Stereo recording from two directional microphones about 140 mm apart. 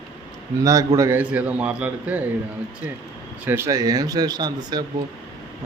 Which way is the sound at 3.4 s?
15° right (ahead or behind).